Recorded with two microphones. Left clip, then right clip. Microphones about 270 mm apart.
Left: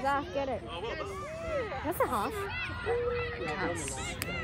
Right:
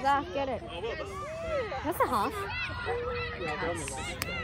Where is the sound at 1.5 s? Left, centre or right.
Right.